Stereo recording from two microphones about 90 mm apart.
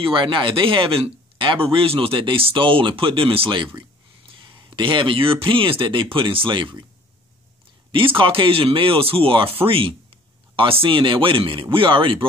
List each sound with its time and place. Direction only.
0.1 s speech: 65° right (ahead or behind)
7.9 s speech: 75° right (ahead or behind)